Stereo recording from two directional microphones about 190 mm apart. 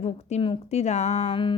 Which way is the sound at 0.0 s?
35° left (ahead or behind).